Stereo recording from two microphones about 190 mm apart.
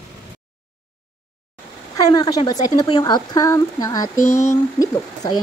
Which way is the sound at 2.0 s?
20° left (ahead or behind).